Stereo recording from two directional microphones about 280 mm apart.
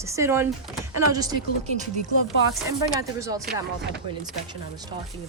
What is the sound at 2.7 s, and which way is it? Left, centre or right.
Speech, centre.